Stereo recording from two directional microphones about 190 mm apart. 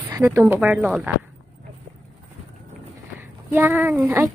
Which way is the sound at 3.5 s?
10° right (ahead or behind).